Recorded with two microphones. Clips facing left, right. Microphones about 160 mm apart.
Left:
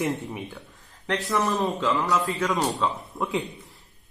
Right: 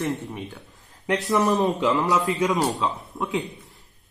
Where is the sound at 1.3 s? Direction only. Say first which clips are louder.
Right 4 dB; 20° right (ahead or behind).